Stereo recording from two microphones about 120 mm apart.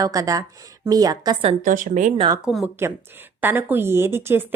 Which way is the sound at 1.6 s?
90° right.